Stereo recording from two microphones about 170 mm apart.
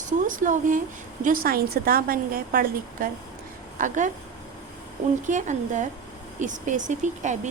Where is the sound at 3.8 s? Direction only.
45° right (ahead or behind).